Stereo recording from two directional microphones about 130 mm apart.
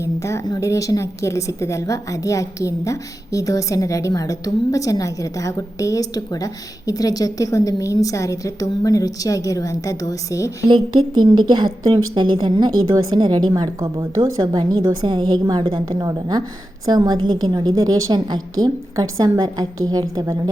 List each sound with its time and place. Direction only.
0.0 s speech: 20° left (ahead or behind)
10.9 s a woman's voice: 35° right (ahead or behind)